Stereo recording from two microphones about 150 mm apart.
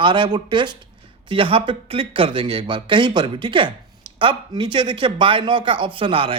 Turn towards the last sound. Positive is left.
turn(degrees=-35)  # may be behind; listen again after turning